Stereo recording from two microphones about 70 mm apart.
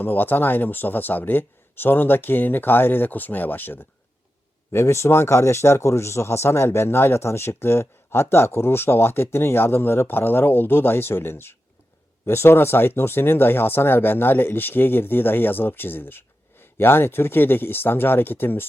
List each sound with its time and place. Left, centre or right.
0.0 s speech: left
4.7 s speech: left